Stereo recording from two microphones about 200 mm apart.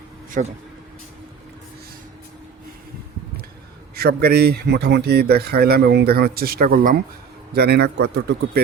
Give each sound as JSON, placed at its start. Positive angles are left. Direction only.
{"t": 0.3, "sound": "speech", "side_deg": -35}
{"t": 3.9, "sound": "a man's voice", "side_deg": -50}